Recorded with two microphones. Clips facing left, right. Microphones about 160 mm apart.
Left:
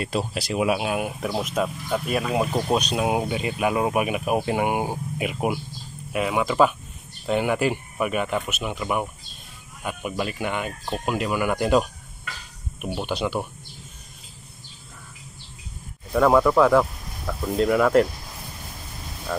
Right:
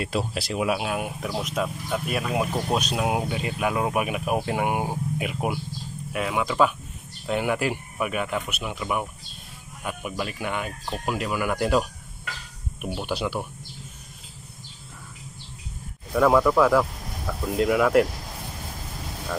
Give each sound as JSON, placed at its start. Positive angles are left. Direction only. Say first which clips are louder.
{"t": 0.0, "sound": "speech", "louder": "left 1 dB", "side_deg": 0}
{"t": 11.5, "sound": "speech", "louder": "left 2 dB", "side_deg": 15}
{"t": 13.1, "sound": "speech", "louder": "left 2 dB", "side_deg": -5}
{"t": 16.2, "sound": "speech", "louder": "left 1 dB", "side_deg": 5}